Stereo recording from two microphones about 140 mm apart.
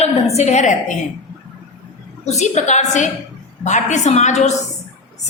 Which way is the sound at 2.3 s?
55° left (ahead or behind).